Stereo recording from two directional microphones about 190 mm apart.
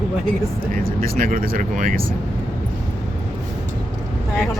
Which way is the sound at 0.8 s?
50° right (ahead or behind).